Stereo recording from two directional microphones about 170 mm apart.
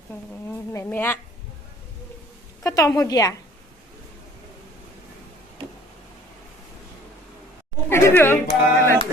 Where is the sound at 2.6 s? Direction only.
20° left (ahead or behind).